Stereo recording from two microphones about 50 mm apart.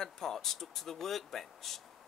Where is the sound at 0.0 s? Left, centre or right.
Centre.